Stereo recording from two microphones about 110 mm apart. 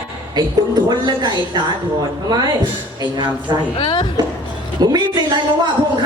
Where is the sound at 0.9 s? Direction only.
40° right (ahead or behind).